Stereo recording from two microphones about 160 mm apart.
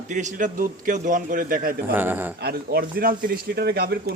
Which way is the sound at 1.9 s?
10° right (ahead or behind).